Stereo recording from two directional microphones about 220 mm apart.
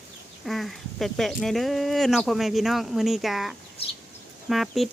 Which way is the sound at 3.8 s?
25° left (ahead or behind).